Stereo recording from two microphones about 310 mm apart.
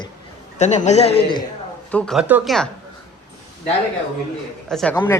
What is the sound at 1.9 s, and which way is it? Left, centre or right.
Speech, centre.